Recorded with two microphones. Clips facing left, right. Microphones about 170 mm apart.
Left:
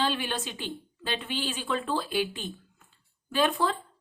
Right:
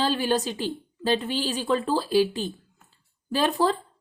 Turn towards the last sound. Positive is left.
turn(degrees=-35)  # may be behind; listen again after turning